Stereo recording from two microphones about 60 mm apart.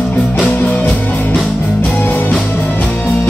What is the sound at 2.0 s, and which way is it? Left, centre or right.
Music, left.